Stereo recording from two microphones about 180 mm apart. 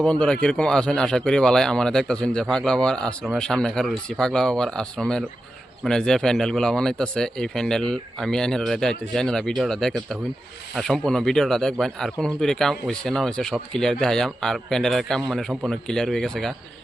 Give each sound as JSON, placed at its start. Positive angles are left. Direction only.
{"t": 0.0, "sound": "speech", "side_deg": 5}